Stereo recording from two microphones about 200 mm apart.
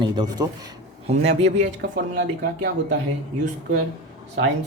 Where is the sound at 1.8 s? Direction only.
50° right (ahead or behind).